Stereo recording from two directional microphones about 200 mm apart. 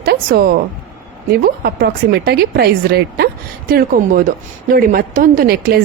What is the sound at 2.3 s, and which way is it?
A woman's voice, 50° right (ahead or behind).